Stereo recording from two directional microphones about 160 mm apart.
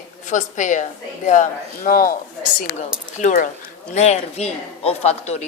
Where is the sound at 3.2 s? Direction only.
50° left (ahead or behind).